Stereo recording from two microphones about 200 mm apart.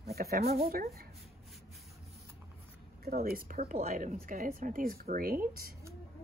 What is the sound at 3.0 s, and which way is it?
Speech, 45° right (ahead or behind).